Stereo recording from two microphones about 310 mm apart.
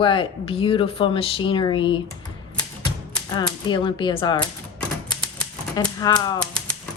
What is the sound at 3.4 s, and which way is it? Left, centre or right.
Speech, centre.